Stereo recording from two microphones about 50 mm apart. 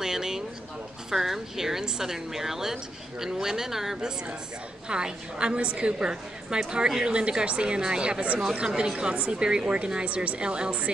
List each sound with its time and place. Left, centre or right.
0.0 s a sound: centre
1.1 s a woman's voice: centre
4.8 s speech: centre